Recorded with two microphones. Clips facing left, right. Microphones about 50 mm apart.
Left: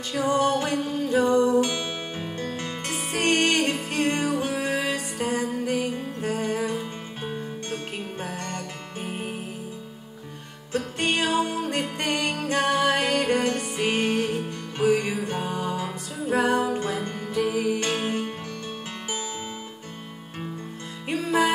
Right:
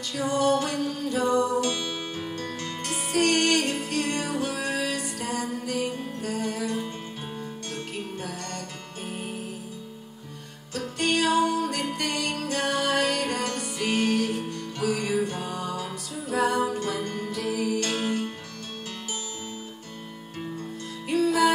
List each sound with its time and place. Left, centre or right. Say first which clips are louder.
0.1 s music: left 1 dB; left
10.7 s music: left 1 dB; left
21.1 s music: right 1 dB; left